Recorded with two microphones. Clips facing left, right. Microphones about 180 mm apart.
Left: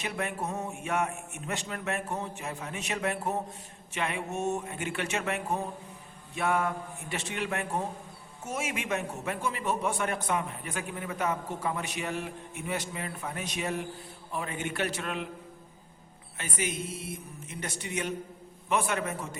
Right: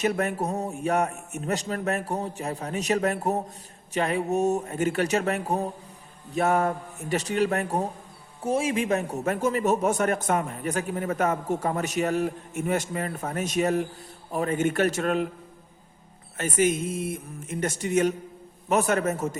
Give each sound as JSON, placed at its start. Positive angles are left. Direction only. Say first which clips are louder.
{"t": 0.0, "sound": "a man's voice", "louder": "right 8 dB", "side_deg": -45}
{"t": 16.4, "sound": "a man's voice", "louder": "right 10 dB", "side_deg": -45}